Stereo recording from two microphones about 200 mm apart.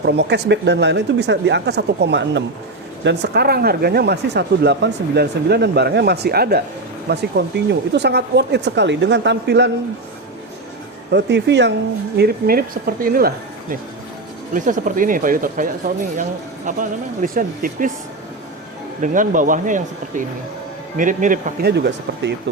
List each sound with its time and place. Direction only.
0.0 s speech: 55° right (ahead or behind)
11.1 s speech: 60° right (ahead or behind)
12.1 s speech: 50° right (ahead or behind)
19.0 s speech: 40° right (ahead or behind)
21.7 s speech: 60° right (ahead or behind)